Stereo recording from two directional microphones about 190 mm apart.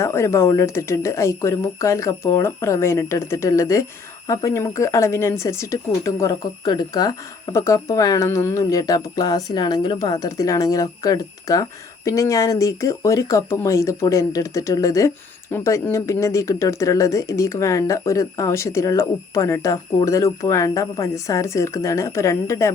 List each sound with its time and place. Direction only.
0.0 s speech: 15° left (ahead or behind)